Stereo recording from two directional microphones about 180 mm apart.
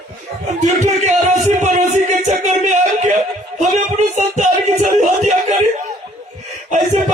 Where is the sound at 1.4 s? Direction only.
40° right (ahead or behind).